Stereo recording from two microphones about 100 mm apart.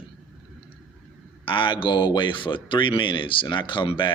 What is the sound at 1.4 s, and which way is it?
Speech, 55° left (ahead or behind).